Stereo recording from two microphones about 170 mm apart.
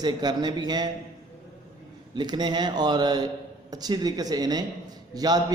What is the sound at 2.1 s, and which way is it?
A man's voice, 25° right (ahead or behind).